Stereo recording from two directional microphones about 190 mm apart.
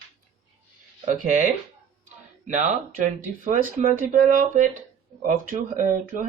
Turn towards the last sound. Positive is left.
turn(degrees=-40)  # may be behind; listen again after turning